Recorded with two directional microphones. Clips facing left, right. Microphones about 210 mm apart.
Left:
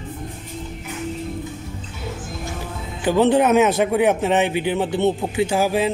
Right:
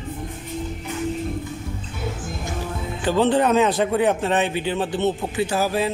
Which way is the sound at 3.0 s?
10° left (ahead or behind).